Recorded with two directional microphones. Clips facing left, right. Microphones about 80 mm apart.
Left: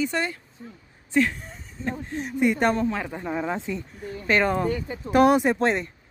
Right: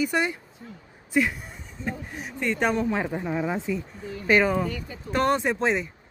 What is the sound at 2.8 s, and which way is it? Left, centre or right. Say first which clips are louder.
Speech: right 1 dB; centre.